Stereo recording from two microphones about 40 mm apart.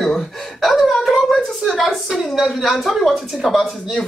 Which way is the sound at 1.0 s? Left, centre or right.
Centre.